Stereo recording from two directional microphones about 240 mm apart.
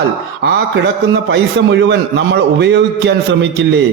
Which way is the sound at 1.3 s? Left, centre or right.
Right.